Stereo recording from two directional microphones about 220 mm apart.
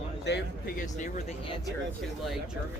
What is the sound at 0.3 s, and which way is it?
Speech, 50° left (ahead or behind).